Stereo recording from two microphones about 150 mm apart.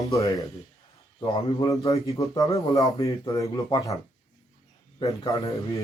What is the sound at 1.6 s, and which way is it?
A man's voice, 20° left (ahead or behind).